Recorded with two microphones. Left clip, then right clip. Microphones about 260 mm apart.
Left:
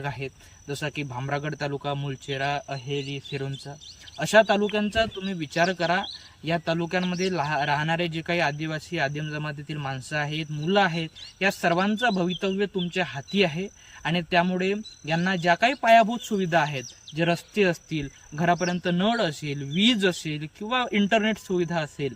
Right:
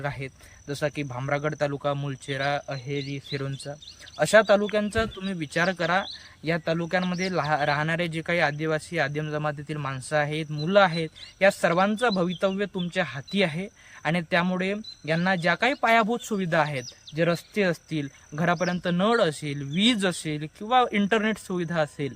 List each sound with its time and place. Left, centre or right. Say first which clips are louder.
0.7 s speech: right 2 dB; centre
2.8 s speech: left 1 dB; right
4.2 s speech: right 1 dB; centre